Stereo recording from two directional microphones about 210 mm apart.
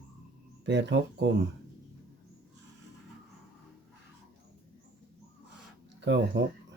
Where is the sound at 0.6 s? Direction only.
55° right (ahead or behind).